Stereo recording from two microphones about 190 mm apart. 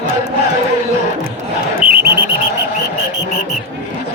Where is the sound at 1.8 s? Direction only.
50° right (ahead or behind).